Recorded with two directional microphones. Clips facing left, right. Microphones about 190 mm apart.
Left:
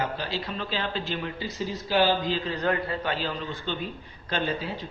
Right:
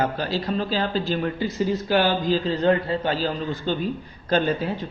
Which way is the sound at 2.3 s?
30° right (ahead or behind).